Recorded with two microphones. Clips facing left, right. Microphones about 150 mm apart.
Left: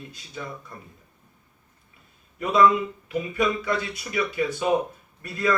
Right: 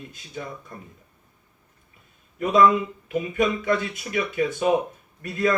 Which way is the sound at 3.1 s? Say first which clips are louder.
Right 2 dB; 45° right (ahead or behind).